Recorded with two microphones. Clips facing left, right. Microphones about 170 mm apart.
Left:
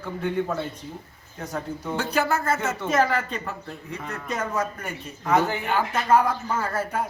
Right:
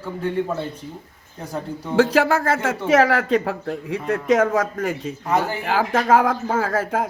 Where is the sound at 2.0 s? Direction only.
90° right.